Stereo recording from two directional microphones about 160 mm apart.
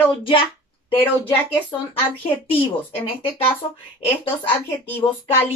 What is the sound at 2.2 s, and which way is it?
Speech, 35° left (ahead or behind).